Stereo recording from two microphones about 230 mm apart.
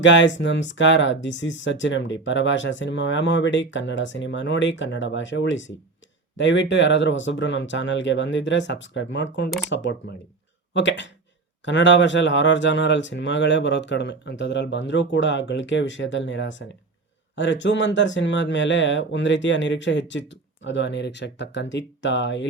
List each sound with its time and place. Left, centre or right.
0.0 s speech: left